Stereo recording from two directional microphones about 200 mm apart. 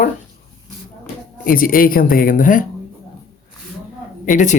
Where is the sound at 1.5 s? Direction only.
45° left (ahead or behind).